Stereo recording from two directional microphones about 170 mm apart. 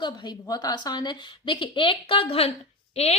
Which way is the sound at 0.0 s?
25° left (ahead or behind).